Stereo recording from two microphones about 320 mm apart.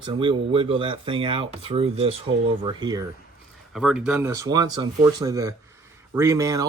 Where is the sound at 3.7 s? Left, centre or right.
Centre.